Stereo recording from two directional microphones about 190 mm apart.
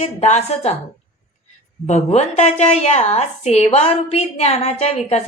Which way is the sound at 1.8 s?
35° left (ahead or behind).